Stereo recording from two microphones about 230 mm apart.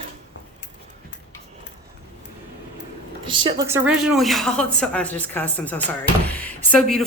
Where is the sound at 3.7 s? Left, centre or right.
Centre.